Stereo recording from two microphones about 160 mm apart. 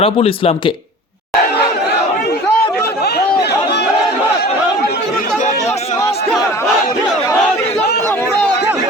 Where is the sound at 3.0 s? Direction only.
90° left.